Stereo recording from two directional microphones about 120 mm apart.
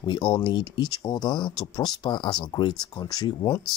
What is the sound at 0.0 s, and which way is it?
Speech, 40° left (ahead or behind).